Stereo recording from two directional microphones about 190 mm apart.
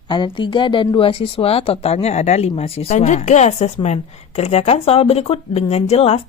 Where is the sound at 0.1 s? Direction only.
25° left (ahead or behind).